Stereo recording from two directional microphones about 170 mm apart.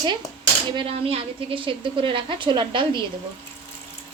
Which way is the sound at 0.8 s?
35° right (ahead or behind).